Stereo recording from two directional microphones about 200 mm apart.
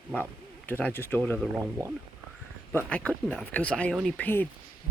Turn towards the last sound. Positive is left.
turn(degrees=10)  # may be behind; listen again after turning